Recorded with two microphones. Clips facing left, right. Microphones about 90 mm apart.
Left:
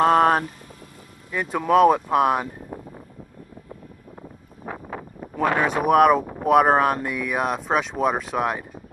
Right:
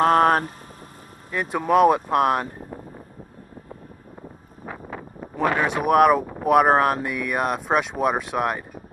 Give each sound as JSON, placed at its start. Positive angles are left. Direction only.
{"t": 0.0, "sound": "vehicle", "side_deg": 0}
{"t": 1.3, "sound": "speech", "side_deg": 0}
{"t": 5.7, "sound": "speech", "side_deg": 0}